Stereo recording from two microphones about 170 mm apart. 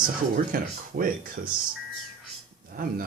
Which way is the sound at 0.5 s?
55° right (ahead or behind).